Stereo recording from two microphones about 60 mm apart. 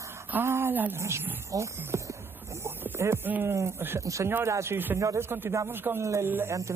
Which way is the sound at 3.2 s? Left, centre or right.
Right.